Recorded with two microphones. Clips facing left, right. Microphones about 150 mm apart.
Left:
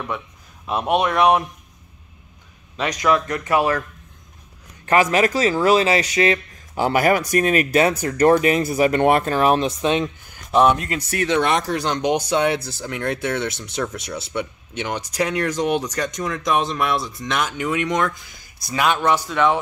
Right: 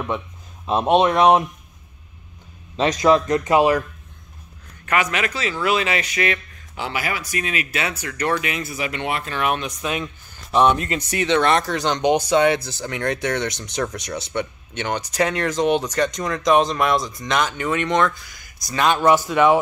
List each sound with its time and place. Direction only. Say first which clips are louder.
0.7 s speech: right 3 dB; 25° right (ahead or behind)
2.8 s speech: right 3 dB; 25° right (ahead or behind)
4.8 s speech: left 5 dB; 30° left (ahead or behind)
10.5 s speech: left 1 dB; 5° left (ahead or behind)
18.9 s speech: right 3 dB; 10° right (ahead or behind)